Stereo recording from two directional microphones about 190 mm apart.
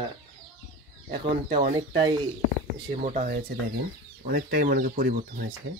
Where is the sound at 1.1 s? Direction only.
25° right (ahead or behind).